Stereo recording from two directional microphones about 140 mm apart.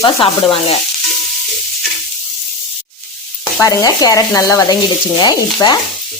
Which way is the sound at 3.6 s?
25° left (ahead or behind).